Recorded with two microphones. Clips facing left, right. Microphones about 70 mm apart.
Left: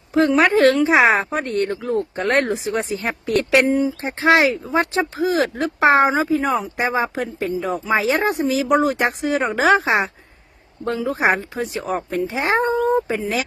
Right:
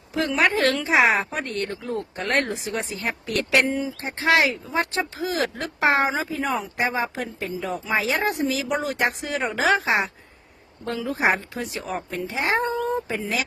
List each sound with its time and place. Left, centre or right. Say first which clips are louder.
0.1 s speech: left 6 dB; left